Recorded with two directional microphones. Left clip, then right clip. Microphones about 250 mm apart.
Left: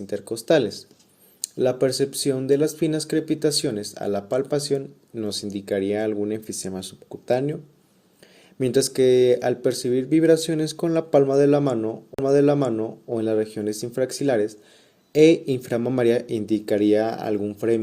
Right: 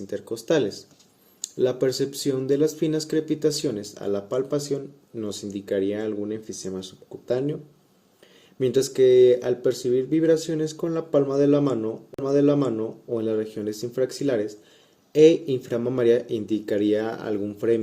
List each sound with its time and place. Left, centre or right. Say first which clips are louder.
0.1 s speech: left 4 dB; left
8.5 s speech: even; left